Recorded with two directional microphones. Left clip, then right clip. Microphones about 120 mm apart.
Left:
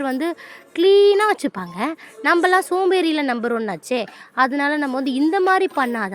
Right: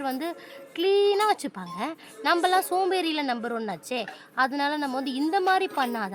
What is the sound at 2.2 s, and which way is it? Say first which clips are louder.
A woman's voice: left 6 dB; 25° left (ahead or behind).